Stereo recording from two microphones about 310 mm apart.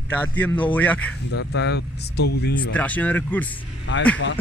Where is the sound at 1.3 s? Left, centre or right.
Left.